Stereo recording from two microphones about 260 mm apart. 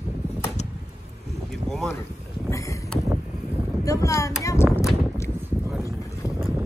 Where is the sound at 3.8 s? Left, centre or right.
Centre.